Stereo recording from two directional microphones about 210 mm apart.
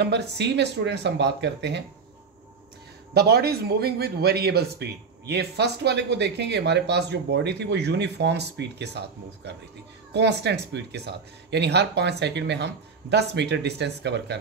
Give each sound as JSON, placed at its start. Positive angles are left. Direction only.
{"t": 0.0, "sound": "a man's voice", "side_deg": -55}
{"t": 3.2, "sound": "a man's voice", "side_deg": -50}